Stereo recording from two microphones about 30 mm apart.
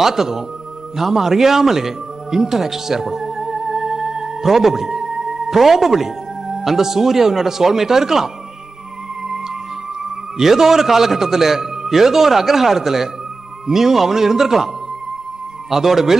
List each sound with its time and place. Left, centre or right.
0.0 s a man's voice: centre
10.3 s a man's voice: centre
15.7 s a man's voice: centre